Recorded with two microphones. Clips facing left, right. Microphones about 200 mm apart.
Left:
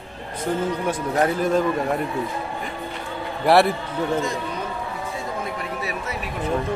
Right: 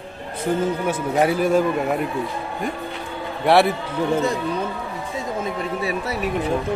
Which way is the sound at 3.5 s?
Centre (ahead or behind).